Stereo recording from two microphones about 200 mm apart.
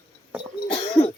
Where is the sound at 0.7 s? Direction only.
25° left (ahead or behind).